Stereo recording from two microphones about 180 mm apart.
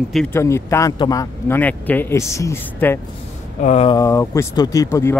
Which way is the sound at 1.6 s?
10° left (ahead or behind).